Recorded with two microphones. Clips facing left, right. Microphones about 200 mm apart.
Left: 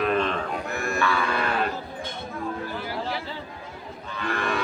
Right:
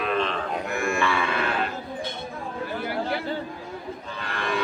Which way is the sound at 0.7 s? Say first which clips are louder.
Right 5 dB; 40° left (ahead or behind).